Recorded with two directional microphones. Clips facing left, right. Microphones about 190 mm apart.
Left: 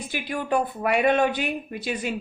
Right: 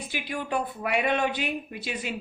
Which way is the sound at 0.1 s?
50° left (ahead or behind).